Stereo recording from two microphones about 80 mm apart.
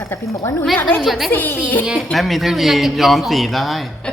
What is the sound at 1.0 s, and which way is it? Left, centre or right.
Speech, centre.